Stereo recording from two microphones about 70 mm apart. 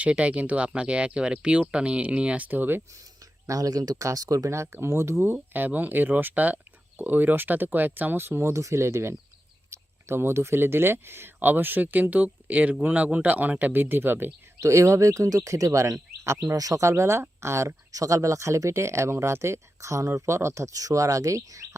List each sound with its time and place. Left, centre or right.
0.0 s speech: centre
3.4 s speech: right
5.2 s speech: right
14.6 s speech: right
16.6 s speech: right
17.9 s speech: right